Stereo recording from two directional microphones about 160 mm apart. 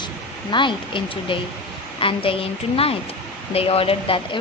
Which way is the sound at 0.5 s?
30° left (ahead or behind).